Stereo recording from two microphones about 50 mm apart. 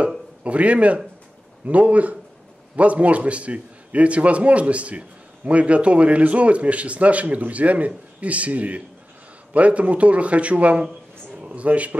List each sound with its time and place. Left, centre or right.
0.4 s a man's voice: right